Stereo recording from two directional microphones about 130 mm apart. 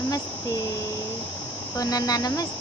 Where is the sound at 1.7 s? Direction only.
30° left (ahead or behind).